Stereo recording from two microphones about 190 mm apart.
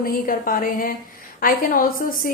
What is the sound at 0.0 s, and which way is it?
A woman's voice, 50° left (ahead or behind).